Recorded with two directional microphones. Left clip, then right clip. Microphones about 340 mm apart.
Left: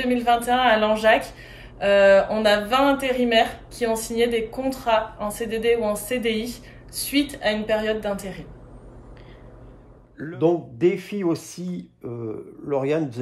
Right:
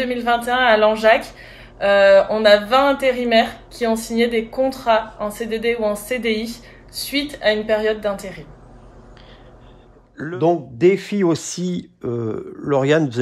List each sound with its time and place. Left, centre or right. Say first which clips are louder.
0.0 s speech: right 1 dB; centre
10.1 s a man's voice: right 7 dB; centre
10.4 s speech: right 4 dB; right